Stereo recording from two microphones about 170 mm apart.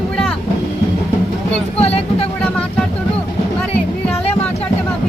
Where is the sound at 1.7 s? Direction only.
35° left (ahead or behind).